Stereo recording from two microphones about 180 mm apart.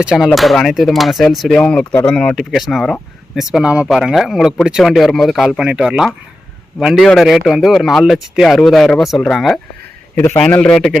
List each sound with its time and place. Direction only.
0.0 s a man's voice: 5° right (ahead or behind)